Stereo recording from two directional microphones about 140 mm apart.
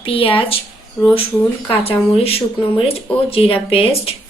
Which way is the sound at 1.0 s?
25° left (ahead or behind).